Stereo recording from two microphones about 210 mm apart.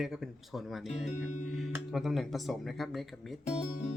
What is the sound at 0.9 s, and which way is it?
Speech, 35° left (ahead or behind).